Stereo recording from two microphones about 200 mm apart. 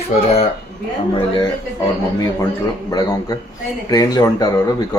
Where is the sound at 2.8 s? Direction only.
20° left (ahead or behind).